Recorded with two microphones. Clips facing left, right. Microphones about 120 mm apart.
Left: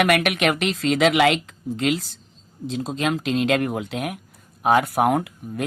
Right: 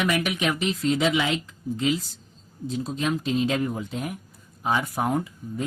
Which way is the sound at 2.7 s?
90° left.